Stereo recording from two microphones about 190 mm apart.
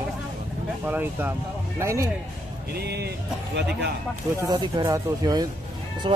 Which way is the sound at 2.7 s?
60° right (ahead or behind).